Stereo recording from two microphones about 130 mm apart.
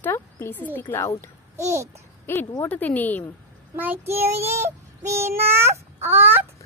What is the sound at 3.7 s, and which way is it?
Child singing, 15° right (ahead or behind).